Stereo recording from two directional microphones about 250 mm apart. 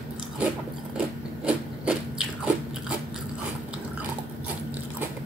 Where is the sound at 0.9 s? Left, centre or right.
Centre.